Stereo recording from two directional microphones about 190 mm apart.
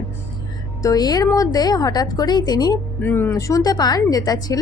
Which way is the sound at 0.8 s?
20° left (ahead or behind).